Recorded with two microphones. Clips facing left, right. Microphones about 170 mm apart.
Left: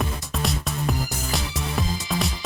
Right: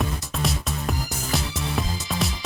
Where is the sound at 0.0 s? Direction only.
Centre (ahead or behind).